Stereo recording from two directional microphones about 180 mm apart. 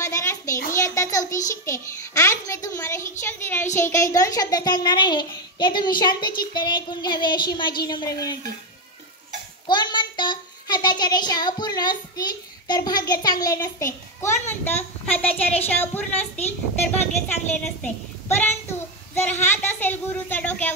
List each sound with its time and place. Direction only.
0.0 s a sound: 15° left (ahead or behind)
0.7 s a child's voice: 15° left (ahead or behind)
9.7 s a child's voice: 25° left (ahead or behind); by 20.7 s 10° left (ahead or behind)